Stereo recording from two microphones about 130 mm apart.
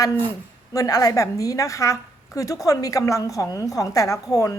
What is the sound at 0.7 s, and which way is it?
A woman's voice, 25° left (ahead or behind).